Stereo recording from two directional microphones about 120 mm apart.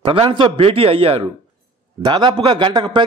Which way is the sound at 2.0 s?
40° right (ahead or behind).